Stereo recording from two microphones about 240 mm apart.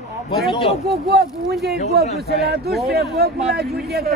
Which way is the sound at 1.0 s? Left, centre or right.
Right.